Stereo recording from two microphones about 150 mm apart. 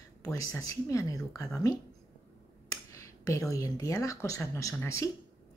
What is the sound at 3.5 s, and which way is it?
A woman's voice, 25° left (ahead or behind).